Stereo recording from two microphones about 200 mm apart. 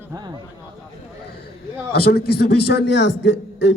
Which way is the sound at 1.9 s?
50° left (ahead or behind).